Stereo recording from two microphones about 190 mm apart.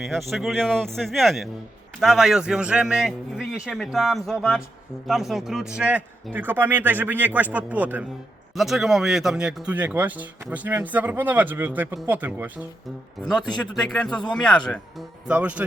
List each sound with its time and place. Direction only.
0.0 s a man's voice: centre (ahead or behind)
13.6 s a man's voice: centre (ahead or behind)
15.3 s a man's voice: 5° right (ahead or behind)